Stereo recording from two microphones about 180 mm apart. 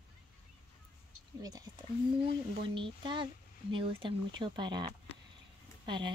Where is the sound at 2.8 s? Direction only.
25° right (ahead or behind).